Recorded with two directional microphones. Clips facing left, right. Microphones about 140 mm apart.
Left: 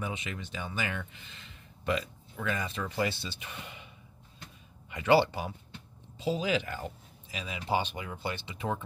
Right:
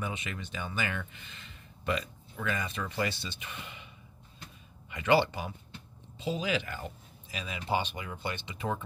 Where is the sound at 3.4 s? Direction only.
40° left (ahead or behind).